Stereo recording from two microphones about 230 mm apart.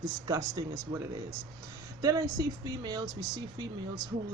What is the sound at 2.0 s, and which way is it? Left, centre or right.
Speech, centre.